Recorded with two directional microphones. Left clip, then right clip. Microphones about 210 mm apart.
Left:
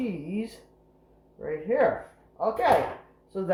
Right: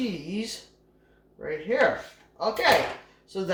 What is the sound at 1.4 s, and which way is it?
Speech, 15° right (ahead or behind).